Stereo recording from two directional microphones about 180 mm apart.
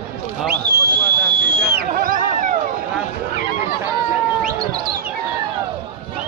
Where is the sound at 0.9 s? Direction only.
65° right (ahead or behind).